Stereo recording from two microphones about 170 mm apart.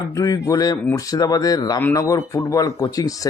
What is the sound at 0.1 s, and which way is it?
Speech, 20° left (ahead or behind).